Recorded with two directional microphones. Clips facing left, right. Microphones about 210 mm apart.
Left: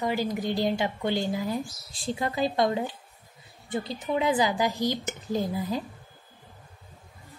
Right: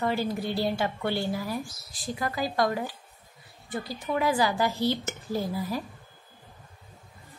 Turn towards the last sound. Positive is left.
turn(degrees=20)  # may be behind; listen again after turning